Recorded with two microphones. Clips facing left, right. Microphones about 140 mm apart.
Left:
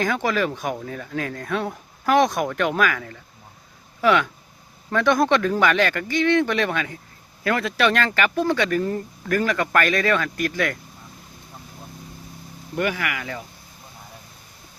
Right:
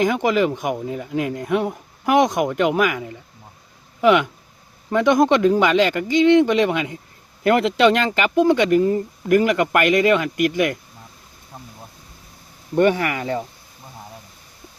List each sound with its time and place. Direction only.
0.0 s speech: 15° right (ahead or behind)
12.7 s speech: 30° right (ahead or behind)